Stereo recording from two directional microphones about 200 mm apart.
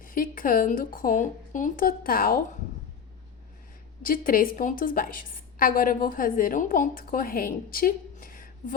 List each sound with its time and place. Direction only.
0.0 s a woman's voice: 45° left (ahead or behind)
4.0 s a woman's voice: 45° left (ahead or behind)